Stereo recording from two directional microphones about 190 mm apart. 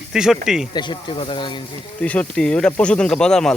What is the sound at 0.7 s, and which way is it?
Speech, 25° left (ahead or behind).